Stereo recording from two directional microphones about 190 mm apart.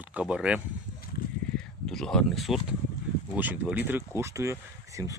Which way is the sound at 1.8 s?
5° left (ahead or behind).